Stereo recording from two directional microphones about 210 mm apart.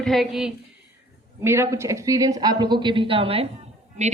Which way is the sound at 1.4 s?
15° right (ahead or behind).